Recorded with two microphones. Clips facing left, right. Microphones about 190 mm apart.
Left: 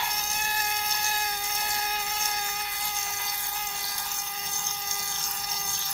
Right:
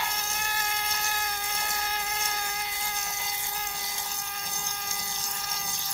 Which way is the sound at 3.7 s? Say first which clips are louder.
Right 1 dB; 20° right (ahead or behind).